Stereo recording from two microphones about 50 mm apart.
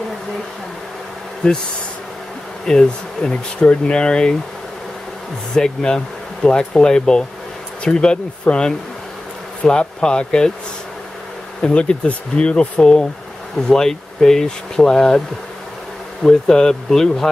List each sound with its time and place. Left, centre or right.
2.6 s speech: centre
5.5 s speech: centre
11.6 s speech: centre
16.3 s speech: centre